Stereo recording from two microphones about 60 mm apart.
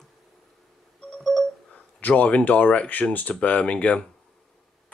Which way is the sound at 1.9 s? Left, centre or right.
Left.